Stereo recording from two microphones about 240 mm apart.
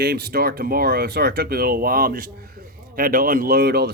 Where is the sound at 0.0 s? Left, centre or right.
Right.